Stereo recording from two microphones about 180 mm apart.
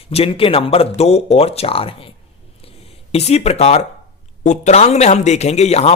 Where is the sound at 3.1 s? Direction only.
35° left (ahead or behind).